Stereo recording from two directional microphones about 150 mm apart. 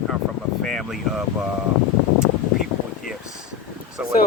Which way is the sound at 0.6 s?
Centre (ahead or behind).